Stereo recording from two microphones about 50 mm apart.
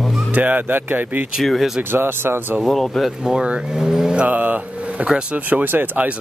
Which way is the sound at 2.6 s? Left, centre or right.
Centre.